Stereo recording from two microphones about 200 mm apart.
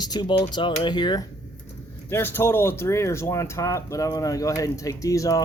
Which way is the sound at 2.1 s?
10° left (ahead or behind).